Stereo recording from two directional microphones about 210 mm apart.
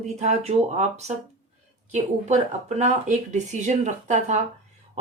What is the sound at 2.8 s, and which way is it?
Speech, 35° right (ahead or behind).